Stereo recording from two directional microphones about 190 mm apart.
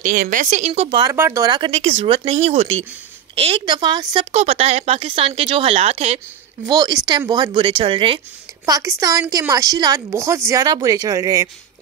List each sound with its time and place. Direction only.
0.0 s speech: 45° right (ahead or behind); by 1.1 s 25° right (ahead or behind)
1.1 s speech: 15° right (ahead or behind); by 6.2 s 30° right (ahead or behind)
6.6 s speech: 20° right (ahead or behind)
8.6 s speech: 15° right (ahead or behind)